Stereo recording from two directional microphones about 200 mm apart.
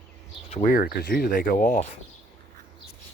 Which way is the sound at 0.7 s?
50° left (ahead or behind).